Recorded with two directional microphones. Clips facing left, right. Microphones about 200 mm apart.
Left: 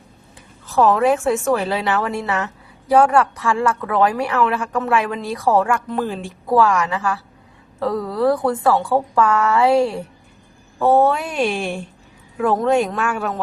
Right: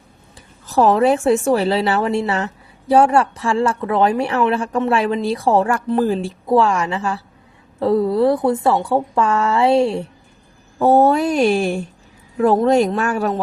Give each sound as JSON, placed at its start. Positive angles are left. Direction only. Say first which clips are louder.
{"t": 0.7, "sound": "a woman's voice", "louder": "right 1 dB", "side_deg": -35}
{"t": 6.5, "sound": "a woman's voice", "louder": "right 1 dB", "side_deg": -25}
{"t": 10.8, "sound": "speech", "louder": "right 2 dB", "side_deg": -40}